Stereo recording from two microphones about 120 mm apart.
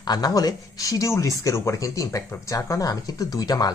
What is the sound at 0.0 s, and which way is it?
A woman's voice, 35° left (ahead or behind).